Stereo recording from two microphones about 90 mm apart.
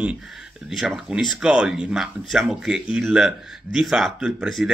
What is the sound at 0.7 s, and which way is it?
Speech, 5° right (ahead or behind).